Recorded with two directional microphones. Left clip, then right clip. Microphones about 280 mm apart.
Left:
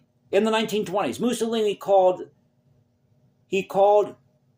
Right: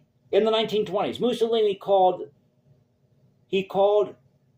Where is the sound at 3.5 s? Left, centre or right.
Left.